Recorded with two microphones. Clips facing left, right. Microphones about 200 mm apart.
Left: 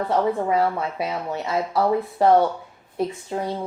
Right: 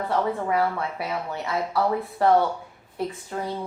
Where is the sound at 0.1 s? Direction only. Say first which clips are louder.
Left 3 dB; 20° left (ahead or behind).